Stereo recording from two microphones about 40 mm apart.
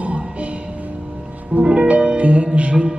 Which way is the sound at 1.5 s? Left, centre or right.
Right.